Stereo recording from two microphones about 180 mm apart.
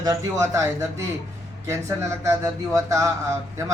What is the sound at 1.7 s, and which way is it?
A man's voice, 15° right (ahead or behind).